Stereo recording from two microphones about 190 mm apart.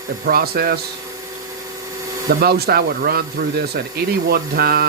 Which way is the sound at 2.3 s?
55° right (ahead or behind).